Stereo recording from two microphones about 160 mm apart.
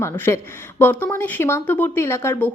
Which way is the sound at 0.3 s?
20° left (ahead or behind).